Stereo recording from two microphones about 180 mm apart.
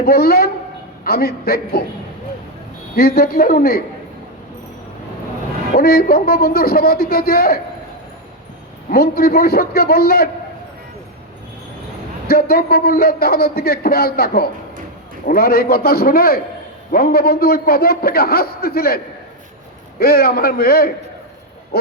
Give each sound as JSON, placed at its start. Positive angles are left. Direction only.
{"t": 0.0, "sound": "a man's voice", "side_deg": 60}
{"t": 2.9, "sound": "a man's voice", "side_deg": 55}
{"t": 5.7, "sound": "a man's voice", "side_deg": 55}
{"t": 8.9, "sound": "a man's voice", "side_deg": 55}
{"t": 12.3, "sound": "a man's voice", "side_deg": 55}
{"t": 20.0, "sound": "a man's voice", "side_deg": 55}